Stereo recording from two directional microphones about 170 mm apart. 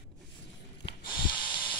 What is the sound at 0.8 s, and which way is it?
Snort, 25° left (ahead or behind).